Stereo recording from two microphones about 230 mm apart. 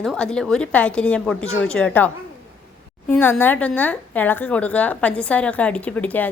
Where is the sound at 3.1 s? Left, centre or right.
Centre.